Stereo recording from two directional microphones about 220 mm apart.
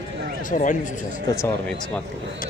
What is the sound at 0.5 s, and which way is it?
Speech, 35° left (ahead or behind).